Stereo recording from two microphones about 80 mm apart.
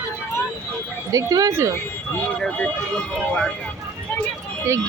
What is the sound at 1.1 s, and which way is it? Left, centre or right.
Speech, right.